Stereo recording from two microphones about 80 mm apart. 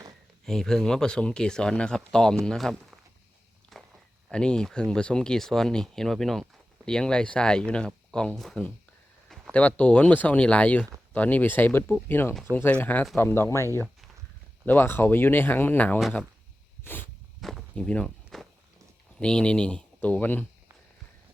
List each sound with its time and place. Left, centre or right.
0.4 s speech: centre
3.7 s walk: centre
4.3 s speech: centre
9.5 s speech: centre
13.1 s speech: left
14.7 s speech: left
16.8 s a sound: left
17.4 s walk: centre
17.7 s speech: centre
18.3 s walk: centre
19.2 s speech: centre